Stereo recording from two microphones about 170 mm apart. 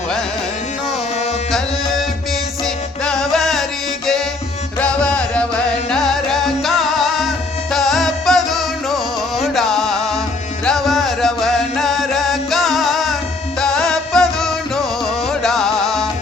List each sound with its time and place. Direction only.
1.5 s music: centre (ahead or behind)